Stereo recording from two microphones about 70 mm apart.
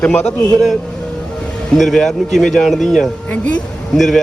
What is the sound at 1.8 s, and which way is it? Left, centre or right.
Speech, centre.